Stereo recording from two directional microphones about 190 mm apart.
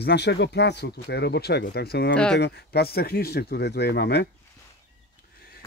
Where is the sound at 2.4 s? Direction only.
60° left (ahead or behind).